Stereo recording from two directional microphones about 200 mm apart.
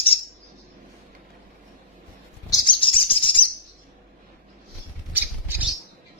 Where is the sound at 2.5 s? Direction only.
20° left (ahead or behind).